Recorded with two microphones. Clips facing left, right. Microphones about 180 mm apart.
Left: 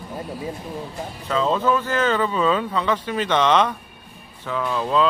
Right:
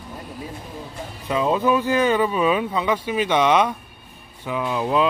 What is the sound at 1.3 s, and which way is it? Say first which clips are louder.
Speech: right 1 dB; 15° right (ahead or behind).